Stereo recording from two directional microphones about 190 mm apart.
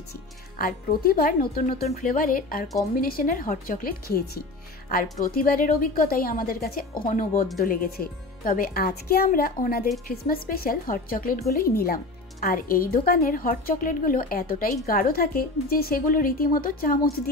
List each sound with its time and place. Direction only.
0.6 s speech: 50° left (ahead or behind)
5.2 s speech: 50° left (ahead or behind)